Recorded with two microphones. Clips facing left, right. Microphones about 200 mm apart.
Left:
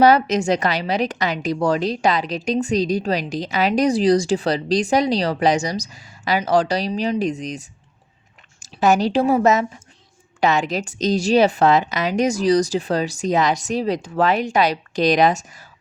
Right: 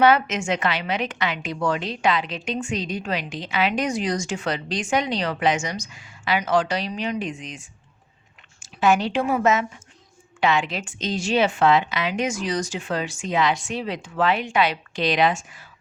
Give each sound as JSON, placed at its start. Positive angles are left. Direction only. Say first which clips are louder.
{"t": 0.0, "sound": "a woman's voice", "louder": "left 4 dB", "side_deg": 40}